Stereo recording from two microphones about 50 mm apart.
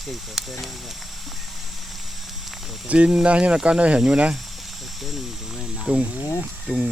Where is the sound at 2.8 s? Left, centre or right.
Right.